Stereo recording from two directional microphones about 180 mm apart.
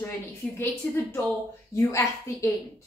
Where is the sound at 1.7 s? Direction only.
15° left (ahead or behind).